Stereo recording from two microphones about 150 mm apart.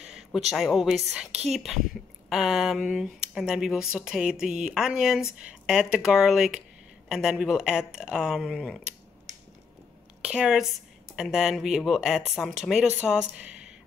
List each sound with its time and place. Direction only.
0.0 s a sound: 5° right (ahead or behind)
0.5 s speech: centre (ahead or behind)
10.2 s speech: 5° right (ahead or behind)